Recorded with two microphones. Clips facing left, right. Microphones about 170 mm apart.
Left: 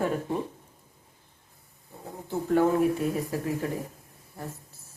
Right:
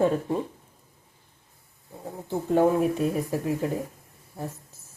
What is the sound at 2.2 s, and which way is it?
Speech, 20° right (ahead or behind).